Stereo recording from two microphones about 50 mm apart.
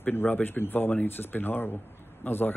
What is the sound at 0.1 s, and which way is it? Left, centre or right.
A man's voice, left.